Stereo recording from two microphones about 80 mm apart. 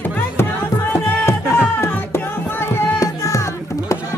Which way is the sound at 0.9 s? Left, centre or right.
Left.